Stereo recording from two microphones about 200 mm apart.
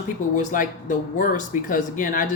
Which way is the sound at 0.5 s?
40° left (ahead or behind).